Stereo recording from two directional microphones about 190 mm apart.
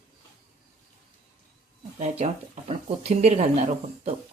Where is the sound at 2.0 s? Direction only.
35° right (ahead or behind).